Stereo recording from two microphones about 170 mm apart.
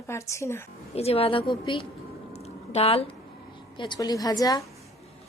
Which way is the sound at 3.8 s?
25° left (ahead or behind).